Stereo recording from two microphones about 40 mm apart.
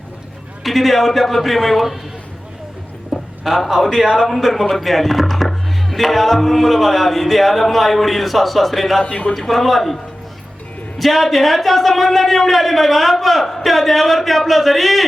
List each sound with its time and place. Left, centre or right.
0.6 s speech: centre
3.1 s a sound: centre
4.0 s a man's voice: centre
9.0 s a man's voice: left
9.3 s speech: centre